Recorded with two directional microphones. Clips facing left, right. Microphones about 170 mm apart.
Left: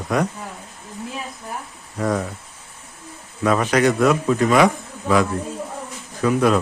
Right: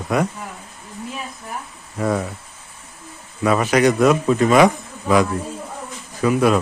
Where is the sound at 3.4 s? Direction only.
10° right (ahead or behind).